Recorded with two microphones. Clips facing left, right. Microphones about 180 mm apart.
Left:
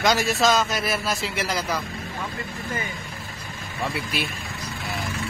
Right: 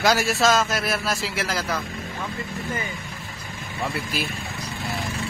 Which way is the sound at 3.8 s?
Centre (ahead or behind).